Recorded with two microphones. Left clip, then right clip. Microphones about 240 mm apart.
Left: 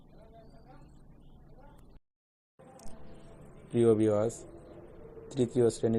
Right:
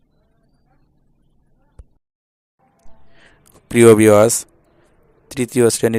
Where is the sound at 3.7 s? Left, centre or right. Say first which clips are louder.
Right 17 dB; right.